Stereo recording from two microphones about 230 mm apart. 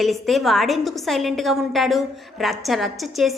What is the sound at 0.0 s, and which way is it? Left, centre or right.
A woman's voice, centre.